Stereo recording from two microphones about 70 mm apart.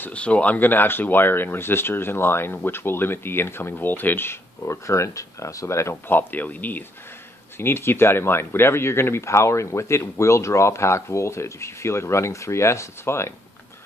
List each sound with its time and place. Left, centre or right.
0.0 s speech: centre
4.6 s speech: left
6.0 s speech: left
7.5 s speech: left